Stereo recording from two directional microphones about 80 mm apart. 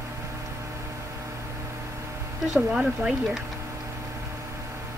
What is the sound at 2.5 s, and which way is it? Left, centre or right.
Speech, centre.